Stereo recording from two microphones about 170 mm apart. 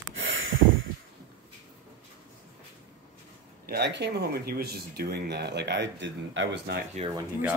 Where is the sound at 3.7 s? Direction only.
80° right.